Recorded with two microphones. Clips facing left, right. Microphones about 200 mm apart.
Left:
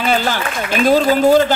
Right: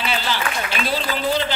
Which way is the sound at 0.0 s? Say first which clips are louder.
Left 7 dB; 45° left (ahead or behind).